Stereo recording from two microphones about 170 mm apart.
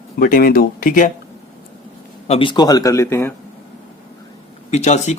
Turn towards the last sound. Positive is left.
turn(degrees=40)  # may be behind; listen again after turning